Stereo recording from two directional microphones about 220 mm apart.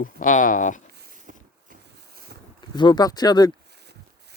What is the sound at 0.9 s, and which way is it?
Boat, 40° right (ahead or behind).